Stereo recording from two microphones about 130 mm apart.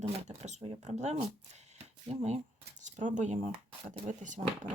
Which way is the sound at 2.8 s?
75° right (ahead or behind).